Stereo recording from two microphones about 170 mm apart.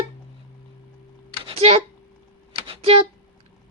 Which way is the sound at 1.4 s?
35° right (ahead or behind).